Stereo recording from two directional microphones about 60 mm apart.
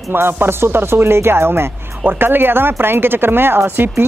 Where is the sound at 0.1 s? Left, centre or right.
Right.